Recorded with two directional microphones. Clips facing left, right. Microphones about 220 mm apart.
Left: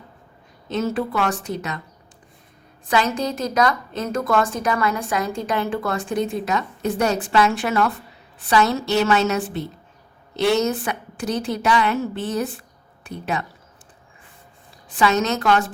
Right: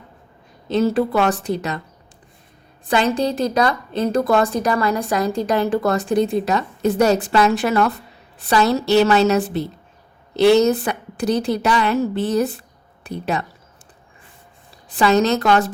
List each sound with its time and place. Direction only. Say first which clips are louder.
0.7 s a woman's voice: right 6 dB; 35° right (ahead or behind)
2.8 s a woman's voice: right 3 dB; 35° right (ahead or behind)
14.8 s a woman's voice: right 4 dB; 35° right (ahead or behind)